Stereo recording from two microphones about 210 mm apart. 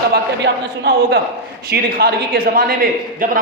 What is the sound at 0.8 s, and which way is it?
A woman's voice, 45° right (ahead or behind).